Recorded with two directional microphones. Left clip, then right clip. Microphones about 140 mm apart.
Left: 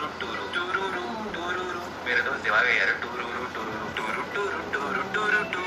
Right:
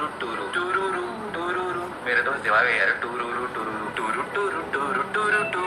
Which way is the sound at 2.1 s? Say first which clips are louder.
Right 3 dB; 30° right (ahead or behind).